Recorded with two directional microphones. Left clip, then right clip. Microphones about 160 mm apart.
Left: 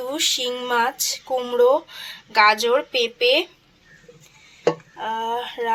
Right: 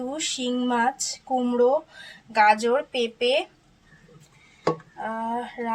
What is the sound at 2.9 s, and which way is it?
Speech, 65° left (ahead or behind).